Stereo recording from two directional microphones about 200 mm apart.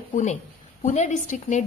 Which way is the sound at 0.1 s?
35° left (ahead or behind).